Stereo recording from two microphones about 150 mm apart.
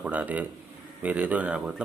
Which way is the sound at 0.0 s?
10° right (ahead or behind).